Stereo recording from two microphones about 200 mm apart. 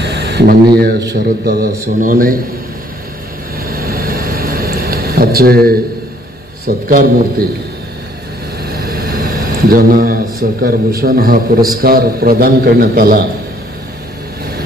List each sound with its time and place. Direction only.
0.0 s a sound: 60° right (ahead or behind)
0.7 s a man's voice: 50° right (ahead or behind)
3.5 s vehicle: 50° right (ahead or behind)
6.6 s a man's voice: 45° right (ahead or behind)
8.6 s a man's voice: 50° right (ahead or behind)